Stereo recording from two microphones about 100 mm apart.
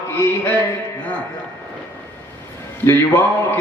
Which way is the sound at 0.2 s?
25° left (ahead or behind).